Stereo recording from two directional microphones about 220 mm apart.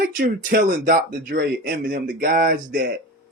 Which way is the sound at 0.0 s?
45° right (ahead or behind).